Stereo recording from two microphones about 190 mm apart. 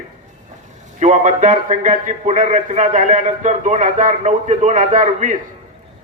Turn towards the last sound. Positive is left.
turn(degrees=-40)  # may be behind; listen again after turning